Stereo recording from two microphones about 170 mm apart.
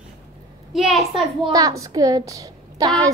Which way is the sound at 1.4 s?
20° right (ahead or behind).